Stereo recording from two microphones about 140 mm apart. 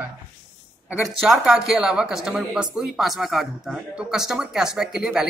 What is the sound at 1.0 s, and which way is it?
Speech, centre (ahead or behind).